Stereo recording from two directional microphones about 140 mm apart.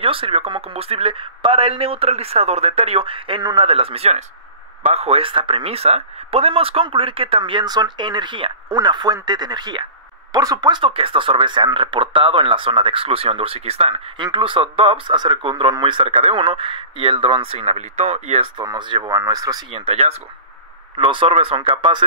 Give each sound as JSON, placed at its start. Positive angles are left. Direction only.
{"t": 0.0, "sound": "speech", "side_deg": -40}
{"t": 18.6, "sound": "speech", "side_deg": -30}
{"t": 19.7, "sound": "speech", "side_deg": -45}